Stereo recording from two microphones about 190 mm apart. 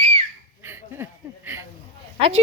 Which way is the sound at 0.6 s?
10° right (ahead or behind).